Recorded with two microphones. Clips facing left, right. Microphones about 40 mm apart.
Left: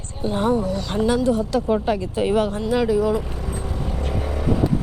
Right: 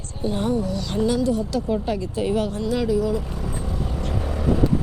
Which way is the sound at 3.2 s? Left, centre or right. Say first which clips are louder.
Left 1 dB; centre.